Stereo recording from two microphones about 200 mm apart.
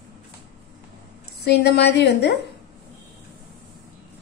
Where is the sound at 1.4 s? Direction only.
55° left (ahead or behind).